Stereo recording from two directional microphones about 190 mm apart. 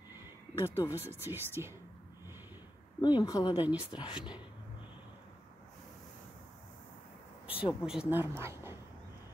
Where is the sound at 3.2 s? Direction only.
20° left (ahead or behind).